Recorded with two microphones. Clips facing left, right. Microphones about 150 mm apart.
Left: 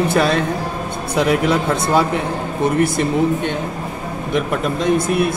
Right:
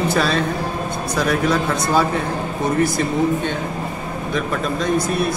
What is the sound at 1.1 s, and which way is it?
Speech, 25° left (ahead or behind).